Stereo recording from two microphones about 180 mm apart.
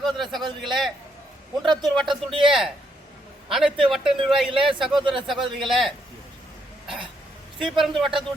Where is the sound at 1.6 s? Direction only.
25° right (ahead or behind).